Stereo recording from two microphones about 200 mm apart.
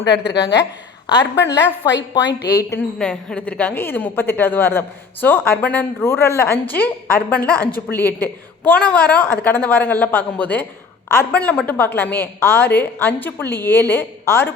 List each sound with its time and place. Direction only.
0.4 s a woman's voice: 15° left (ahead or behind)
1.2 s speech: 60° left (ahead or behind)
2.5 s a woman's voice: 15° left (ahead or behind)
3.0 s a woman's voice: 5° left (ahead or behind)